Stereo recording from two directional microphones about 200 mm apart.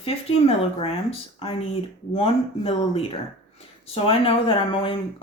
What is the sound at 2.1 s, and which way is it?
Speech, 30° left (ahead or behind).